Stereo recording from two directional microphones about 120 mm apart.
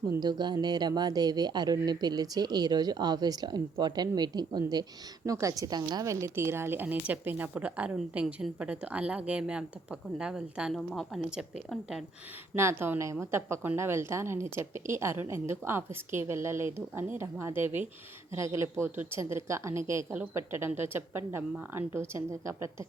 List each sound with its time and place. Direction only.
0.2 s a woman's voice: 35° right (ahead or behind); by 12.0 s 5° right (ahead or behind)
12.5 s a woman's voice: 20° right (ahead or behind)